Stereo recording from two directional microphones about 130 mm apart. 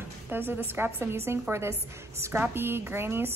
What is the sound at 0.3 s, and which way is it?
A woman's voice, 15° right (ahead or behind).